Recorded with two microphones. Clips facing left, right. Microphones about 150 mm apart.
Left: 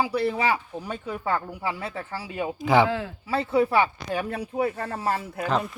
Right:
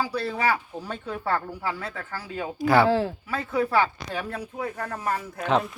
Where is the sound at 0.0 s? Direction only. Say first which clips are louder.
Left 2 dB; 20° left (ahead or behind).